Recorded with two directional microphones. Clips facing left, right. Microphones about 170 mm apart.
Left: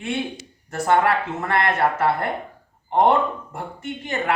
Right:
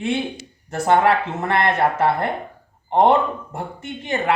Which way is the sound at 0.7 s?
25° right (ahead or behind).